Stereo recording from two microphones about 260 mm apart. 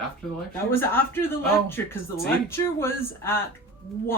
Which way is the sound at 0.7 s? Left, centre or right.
Centre.